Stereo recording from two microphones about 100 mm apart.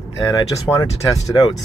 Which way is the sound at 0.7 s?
25° left (ahead or behind).